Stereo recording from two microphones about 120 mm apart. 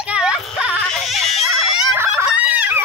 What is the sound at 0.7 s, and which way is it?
Baby cry, 5° left (ahead or behind).